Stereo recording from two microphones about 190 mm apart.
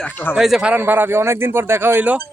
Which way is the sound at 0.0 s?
10° left (ahead or behind).